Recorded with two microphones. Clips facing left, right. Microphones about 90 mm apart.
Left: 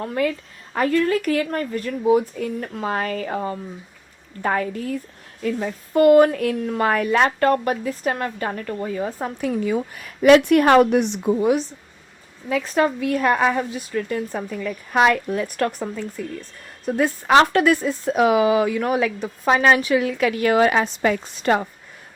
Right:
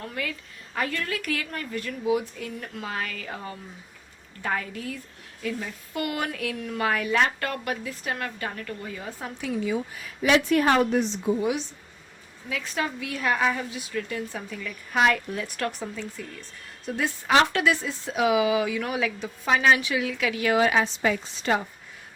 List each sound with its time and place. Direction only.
0.0 s a woman's voice: 35° left (ahead or behind)
7.3 s speech: 35° left (ahead or behind); by 11.4 s 65° left (ahead or behind)
12.5 s speech: 45° left (ahead or behind)